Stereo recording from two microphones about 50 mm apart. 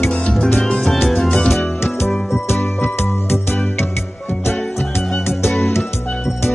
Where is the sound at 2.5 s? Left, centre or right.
Left.